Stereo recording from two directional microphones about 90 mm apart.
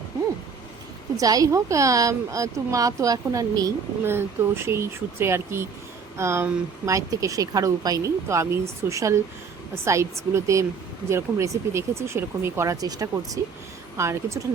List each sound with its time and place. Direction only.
1.1 s speech: 40° right (ahead or behind)
4.0 s speech: 25° right (ahead or behind)
12.7 s speech: 40° right (ahead or behind)